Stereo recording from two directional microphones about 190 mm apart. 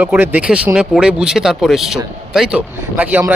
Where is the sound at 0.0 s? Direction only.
10° right (ahead or behind).